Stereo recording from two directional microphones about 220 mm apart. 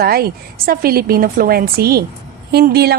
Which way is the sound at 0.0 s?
45° right (ahead or behind).